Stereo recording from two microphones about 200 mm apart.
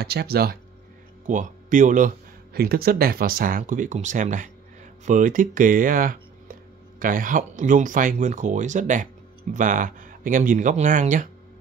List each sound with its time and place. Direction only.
0.0 s speech: 55° right (ahead or behind)
1.2 s speech: 40° right (ahead or behind)